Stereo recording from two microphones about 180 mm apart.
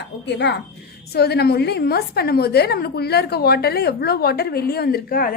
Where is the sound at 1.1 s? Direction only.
60° left (ahead or behind).